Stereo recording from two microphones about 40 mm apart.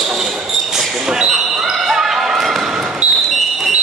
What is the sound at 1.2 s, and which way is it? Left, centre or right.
Basketball bounce, centre.